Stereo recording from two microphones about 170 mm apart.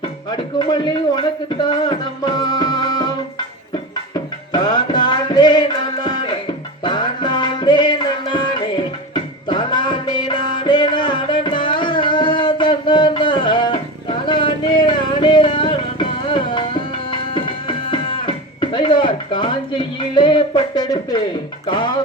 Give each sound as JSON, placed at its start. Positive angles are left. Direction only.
{"t": 0.0, "sound": "speech", "side_deg": 25}
{"t": 4.1, "sound": "music", "side_deg": 25}